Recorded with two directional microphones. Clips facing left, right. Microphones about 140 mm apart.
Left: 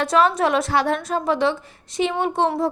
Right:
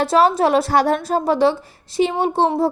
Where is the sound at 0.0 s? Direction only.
35° right (ahead or behind).